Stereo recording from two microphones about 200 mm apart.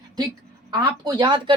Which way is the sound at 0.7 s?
20° right (ahead or behind).